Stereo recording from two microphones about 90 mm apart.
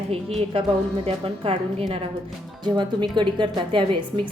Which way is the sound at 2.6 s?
60° right (ahead or behind).